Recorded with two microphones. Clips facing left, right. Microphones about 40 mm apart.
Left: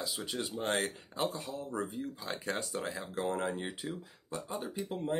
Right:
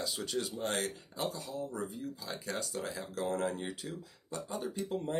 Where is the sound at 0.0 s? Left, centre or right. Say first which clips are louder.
Right 1 dB; centre.